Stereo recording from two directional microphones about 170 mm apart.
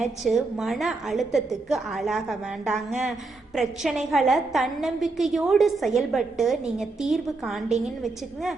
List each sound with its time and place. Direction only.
0.3 s a woman's voice: centre (ahead or behind)